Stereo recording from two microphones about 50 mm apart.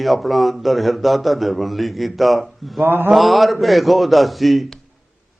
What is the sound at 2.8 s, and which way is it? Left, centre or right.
Mantra, right.